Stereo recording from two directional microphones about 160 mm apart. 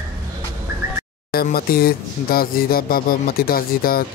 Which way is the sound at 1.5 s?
70° left (ahead or behind).